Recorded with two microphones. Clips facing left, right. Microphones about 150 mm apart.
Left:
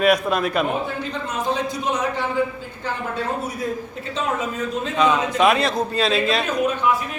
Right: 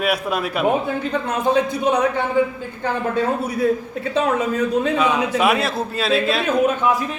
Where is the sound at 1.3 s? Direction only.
60° right (ahead or behind).